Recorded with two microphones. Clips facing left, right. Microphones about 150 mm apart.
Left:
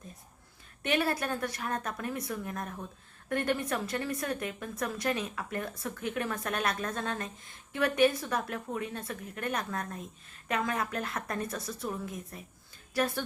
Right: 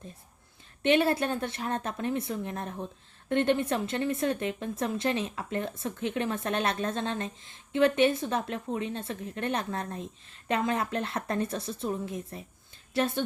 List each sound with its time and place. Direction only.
0.8 s a woman's voice: 25° right (ahead or behind)